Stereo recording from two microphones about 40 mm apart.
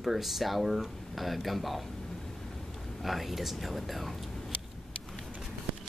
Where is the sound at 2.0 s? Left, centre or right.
Centre.